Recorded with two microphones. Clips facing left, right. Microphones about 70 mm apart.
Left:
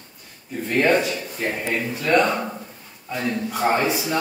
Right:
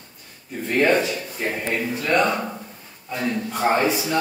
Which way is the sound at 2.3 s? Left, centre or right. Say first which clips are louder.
Even; centre.